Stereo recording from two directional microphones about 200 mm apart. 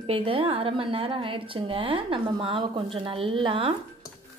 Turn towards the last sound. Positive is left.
turn(degrees=-25)  # may be behind; listen again after turning